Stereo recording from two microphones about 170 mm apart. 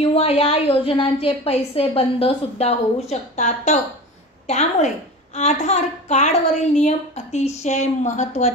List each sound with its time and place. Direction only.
0.0 s a woman's voice: 35° left (ahead or behind)